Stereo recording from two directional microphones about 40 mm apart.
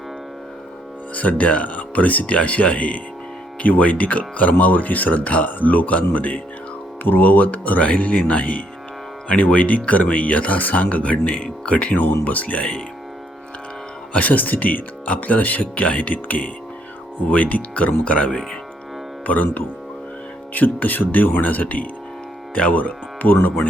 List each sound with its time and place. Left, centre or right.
1.1 s speech: left
11.9 s speech: left
14.1 s speech: left